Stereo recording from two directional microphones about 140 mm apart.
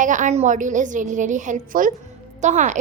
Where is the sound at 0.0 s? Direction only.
65° right (ahead or behind).